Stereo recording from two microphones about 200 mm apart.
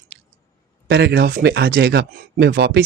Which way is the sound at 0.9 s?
55° right (ahead or behind).